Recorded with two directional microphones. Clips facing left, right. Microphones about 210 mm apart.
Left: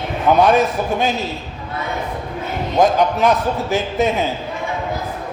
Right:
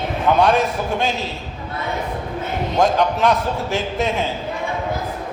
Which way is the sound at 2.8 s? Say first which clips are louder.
Left 2 dB; centre (ahead or behind).